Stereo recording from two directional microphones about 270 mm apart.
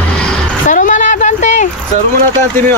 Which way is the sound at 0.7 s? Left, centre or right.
Left.